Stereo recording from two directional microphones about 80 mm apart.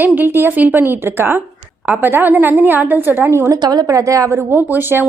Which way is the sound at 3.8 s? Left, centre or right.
Right.